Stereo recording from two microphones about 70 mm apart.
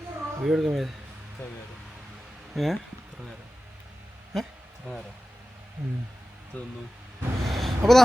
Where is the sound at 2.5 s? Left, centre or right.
Centre.